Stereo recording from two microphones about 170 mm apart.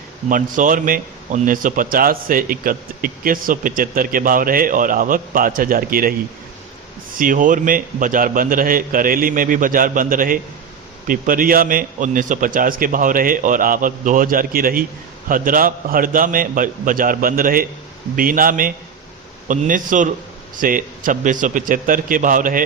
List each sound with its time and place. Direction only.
0.3 s a man's voice: 50° right (ahead or behind)
7.2 s a man's voice: 50° right (ahead or behind)